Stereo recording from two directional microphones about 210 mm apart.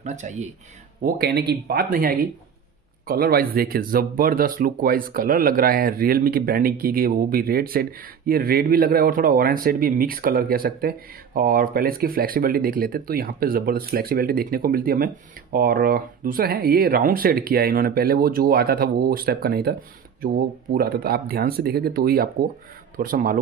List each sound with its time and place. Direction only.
0.0 s speech: 35° right (ahead or behind)
1.0 s speech: 45° right (ahead or behind)